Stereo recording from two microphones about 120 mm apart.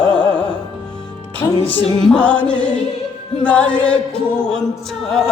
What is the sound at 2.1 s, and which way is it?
Music, 10° left (ahead or behind).